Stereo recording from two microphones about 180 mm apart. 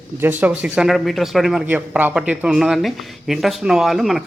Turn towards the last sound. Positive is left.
turn(degrees=0)  # may be behind; listen again after turning